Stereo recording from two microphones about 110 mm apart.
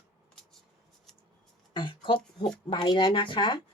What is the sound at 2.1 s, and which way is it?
Speech, 5° left (ahead or behind).